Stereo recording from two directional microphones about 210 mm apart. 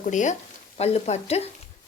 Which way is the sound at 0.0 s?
35° left (ahead or behind).